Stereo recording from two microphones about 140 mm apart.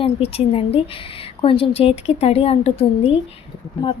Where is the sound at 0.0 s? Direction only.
45° left (ahead or behind).